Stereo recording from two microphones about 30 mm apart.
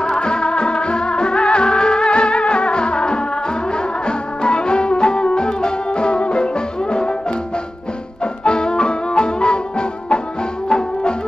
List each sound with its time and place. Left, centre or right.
0.0 s music: left